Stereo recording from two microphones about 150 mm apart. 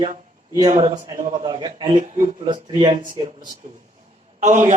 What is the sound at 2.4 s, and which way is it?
Speech, 30° right (ahead or behind).